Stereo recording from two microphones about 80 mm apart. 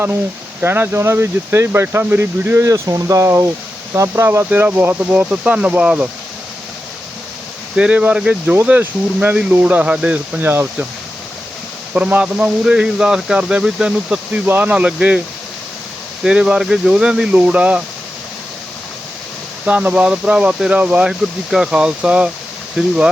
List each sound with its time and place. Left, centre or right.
0.6 s speech: right
2.6 s speech: right; by 6.1 s centre
7.8 s speech: centre
10.4 s speech: right
11.9 s speech: centre
14.4 s speech: right
16.2 s speech: centre
19.6 s speech: centre